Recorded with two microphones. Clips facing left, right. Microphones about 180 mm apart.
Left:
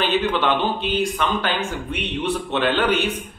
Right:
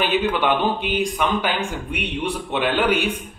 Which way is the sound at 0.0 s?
15° right (ahead or behind).